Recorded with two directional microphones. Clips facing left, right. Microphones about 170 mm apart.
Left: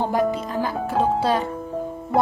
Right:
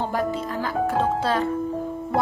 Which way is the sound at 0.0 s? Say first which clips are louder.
Left 3 dB; 15° left (ahead or behind).